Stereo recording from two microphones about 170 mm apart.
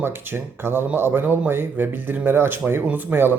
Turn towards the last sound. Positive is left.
turn(degrees=-10)  # may be behind; listen again after turning